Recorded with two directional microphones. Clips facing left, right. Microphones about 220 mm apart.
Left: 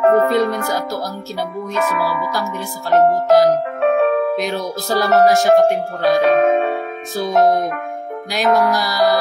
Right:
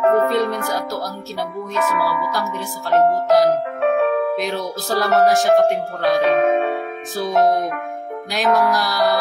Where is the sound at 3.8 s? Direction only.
45° left (ahead or behind).